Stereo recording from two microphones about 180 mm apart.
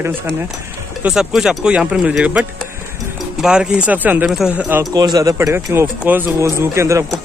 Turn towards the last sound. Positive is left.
turn(degrees=-15)  # may be behind; listen again after turning